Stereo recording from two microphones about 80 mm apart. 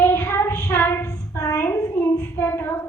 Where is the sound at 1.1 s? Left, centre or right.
Left.